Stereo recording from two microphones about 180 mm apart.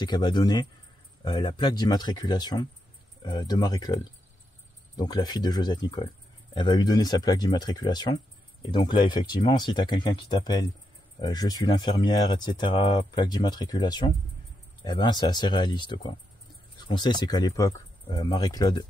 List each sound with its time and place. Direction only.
0.0 s speech: 25° left (ahead or behind)